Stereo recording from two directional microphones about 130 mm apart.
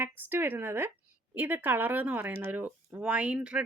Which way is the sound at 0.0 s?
15° right (ahead or behind).